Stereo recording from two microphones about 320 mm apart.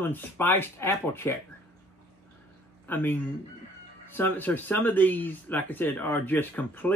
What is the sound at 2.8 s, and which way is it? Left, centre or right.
Speech, centre.